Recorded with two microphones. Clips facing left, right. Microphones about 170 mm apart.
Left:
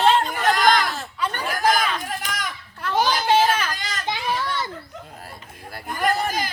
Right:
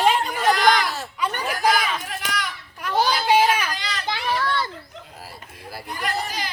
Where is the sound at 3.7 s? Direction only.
45° left (ahead or behind).